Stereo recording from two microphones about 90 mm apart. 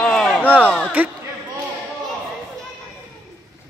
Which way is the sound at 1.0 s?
20° right (ahead or behind).